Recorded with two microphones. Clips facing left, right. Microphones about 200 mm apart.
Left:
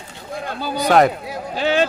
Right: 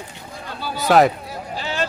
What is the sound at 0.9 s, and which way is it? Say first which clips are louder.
Speech: even; centre (ahead or behind).